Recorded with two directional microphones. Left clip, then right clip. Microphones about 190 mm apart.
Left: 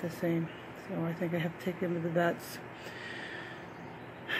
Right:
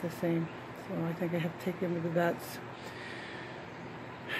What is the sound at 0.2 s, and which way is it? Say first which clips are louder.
Speech: even; 5° right (ahead or behind).